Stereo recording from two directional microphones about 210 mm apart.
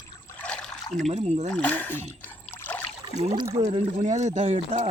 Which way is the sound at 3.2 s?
25° right (ahead or behind).